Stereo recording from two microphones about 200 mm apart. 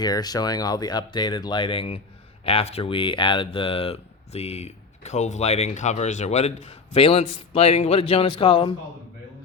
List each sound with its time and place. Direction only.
0.0 s speech: 20° left (ahead or behind)